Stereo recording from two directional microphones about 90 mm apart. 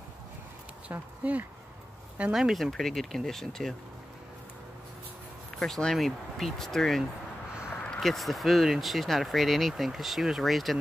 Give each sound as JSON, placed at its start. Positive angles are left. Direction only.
{"t": 2.3, "sound": "speech", "side_deg": 0}
{"t": 5.6, "sound": "speech", "side_deg": 5}